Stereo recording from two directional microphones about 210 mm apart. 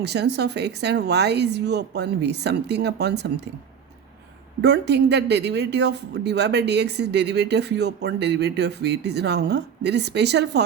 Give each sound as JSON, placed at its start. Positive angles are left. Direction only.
{"t": 0.0, "sound": "speech", "side_deg": -55}
{"t": 4.6, "sound": "speech", "side_deg": -55}